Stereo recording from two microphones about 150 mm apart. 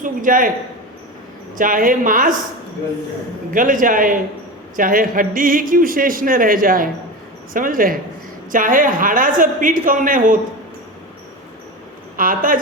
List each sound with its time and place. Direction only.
0.0 s a man's voice: 65° right (ahead or behind)
1.5 s a woman's voice: 65° right (ahead or behind)
3.5 s a woman's voice: 65° right (ahead or behind)
12.1 s speech: 65° right (ahead or behind)